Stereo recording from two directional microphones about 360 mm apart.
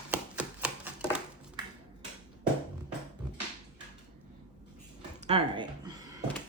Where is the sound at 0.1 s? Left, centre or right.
Centre.